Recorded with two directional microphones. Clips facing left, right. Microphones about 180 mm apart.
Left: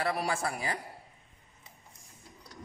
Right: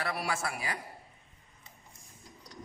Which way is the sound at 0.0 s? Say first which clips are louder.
Left 3 dB; 35° left (ahead or behind).